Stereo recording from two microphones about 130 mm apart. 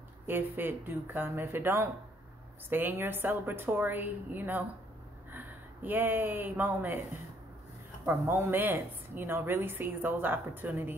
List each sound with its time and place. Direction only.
0.3 s a woman's voice: 15° right (ahead or behind)
8.0 s a woman's voice: 15° right (ahead or behind)